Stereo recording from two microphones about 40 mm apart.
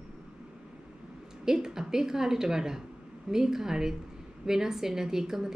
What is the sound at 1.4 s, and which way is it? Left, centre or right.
Speech, centre.